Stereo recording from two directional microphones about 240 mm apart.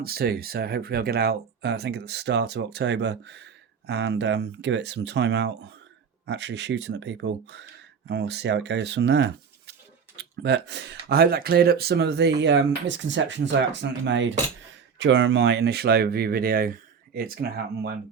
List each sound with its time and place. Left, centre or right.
0.0 s speech: right